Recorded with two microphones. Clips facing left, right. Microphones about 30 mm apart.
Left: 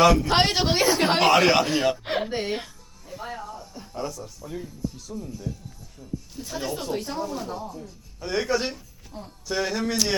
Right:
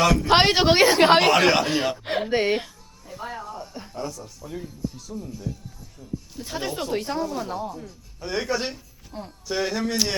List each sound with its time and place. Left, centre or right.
0.0 s speech: centre
0.3 s a man's voice: right
1.3 s speech: centre
2.3 s a man's voice: right
3.1 s music: centre
3.6 s a sound: right
3.9 s speech: centre
6.4 s a man's voice: right
7.3 s speech: centre
7.5 s speech: centre
8.2 s speech: centre
9.1 s a man's voice: right
9.5 s speech: centre